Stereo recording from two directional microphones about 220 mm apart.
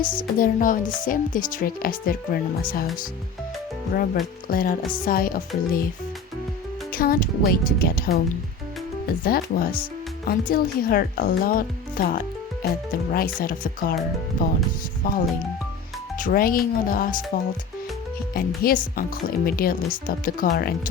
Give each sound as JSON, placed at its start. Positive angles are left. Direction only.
{"t": 0.0, "sound": "speech", "side_deg": 40}
{"t": 6.9, "sound": "speech", "side_deg": 40}
{"t": 9.2, "sound": "speech", "side_deg": 40}
{"t": 15.0, "sound": "speech", "side_deg": 40}
{"t": 18.3, "sound": "speech", "side_deg": 40}